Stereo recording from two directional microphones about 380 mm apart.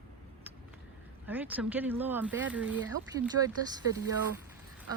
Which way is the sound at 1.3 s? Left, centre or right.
Centre.